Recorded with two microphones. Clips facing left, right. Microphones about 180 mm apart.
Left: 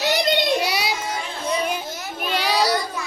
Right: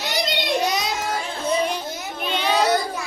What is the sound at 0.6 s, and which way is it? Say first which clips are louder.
Child singing: right 1 dB; 10° left (ahead or behind).